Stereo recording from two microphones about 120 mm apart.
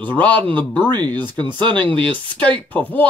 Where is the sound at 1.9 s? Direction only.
45° right (ahead or behind).